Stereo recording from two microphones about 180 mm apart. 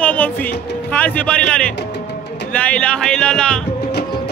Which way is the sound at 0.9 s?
10° left (ahead or behind).